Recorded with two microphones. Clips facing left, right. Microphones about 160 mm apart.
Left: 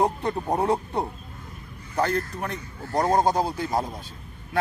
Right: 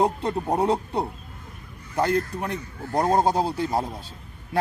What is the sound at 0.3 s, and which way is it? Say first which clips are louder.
Speech: right 3 dB; 10° right (ahead or behind).